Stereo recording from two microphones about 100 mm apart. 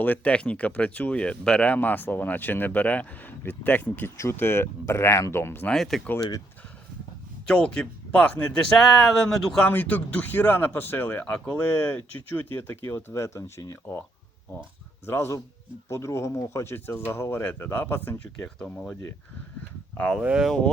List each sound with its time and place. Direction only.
0.0 s speech: 15° left (ahead or behind)
5.6 s speech: 5° left (ahead or behind)
7.4 s speech: 10° left (ahead or behind)
9.6 s speech: 15° left (ahead or behind)
15.0 s speech: 25° left (ahead or behind)
20.2 s speech: 10° right (ahead or behind)
20.5 s speech: 10° left (ahead or behind)